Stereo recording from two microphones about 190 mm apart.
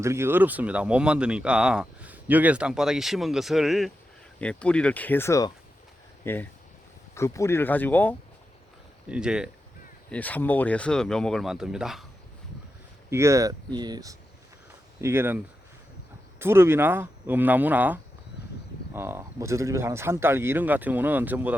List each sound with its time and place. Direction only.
0.0 s speech: 15° right (ahead or behind); by 8.1 s 10° left (ahead or behind)
9.0 s speech: 5° right (ahead or behind)
10.1 s speech: 10° left (ahead or behind)
13.1 s speech: 15° right (ahead or behind)
16.4 s speech: 10° right (ahead or behind)